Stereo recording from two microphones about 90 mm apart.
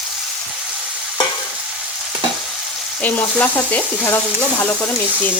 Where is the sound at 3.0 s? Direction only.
15° left (ahead or behind).